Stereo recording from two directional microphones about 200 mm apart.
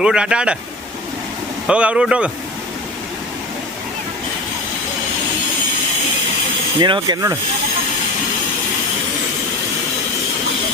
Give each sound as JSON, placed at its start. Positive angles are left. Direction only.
{"t": 0.0, "sound": "speech", "side_deg": -5}
{"t": 1.6, "sound": "speech", "side_deg": -5}
{"t": 6.7, "sound": "speech", "side_deg": -20}